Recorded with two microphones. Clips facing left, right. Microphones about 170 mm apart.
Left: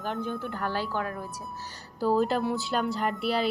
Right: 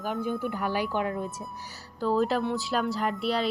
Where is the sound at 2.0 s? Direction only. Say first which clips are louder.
Left 1 dB; centre (ahead or behind).